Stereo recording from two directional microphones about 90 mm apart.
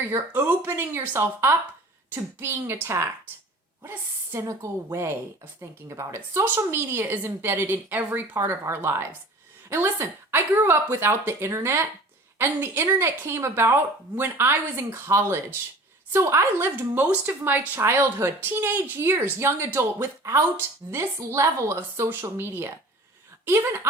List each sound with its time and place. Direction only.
0.3 s a woman's voice: 20° right (ahead or behind)